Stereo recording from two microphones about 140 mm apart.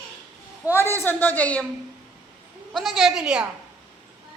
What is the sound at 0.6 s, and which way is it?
A woman's voice, 15° left (ahead or behind).